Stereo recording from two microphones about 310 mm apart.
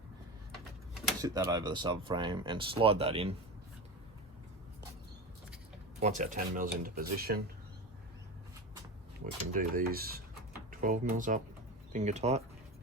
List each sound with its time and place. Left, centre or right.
1.2 s speech: centre
6.0 s speech: right
9.5 s speech: right